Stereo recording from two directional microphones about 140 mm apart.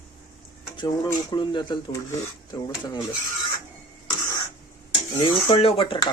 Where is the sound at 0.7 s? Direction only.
30° left (ahead or behind).